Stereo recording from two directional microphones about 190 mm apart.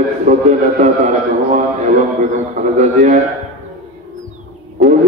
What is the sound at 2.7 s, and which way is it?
Speech, 40° right (ahead or behind).